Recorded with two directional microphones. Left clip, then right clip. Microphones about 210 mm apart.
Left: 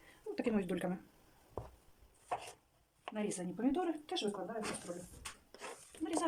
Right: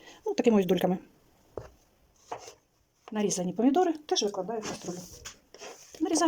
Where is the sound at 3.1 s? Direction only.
40° right (ahead or behind).